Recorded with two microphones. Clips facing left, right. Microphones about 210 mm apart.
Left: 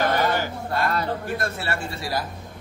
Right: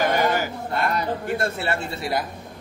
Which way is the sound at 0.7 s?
25° right (ahead or behind).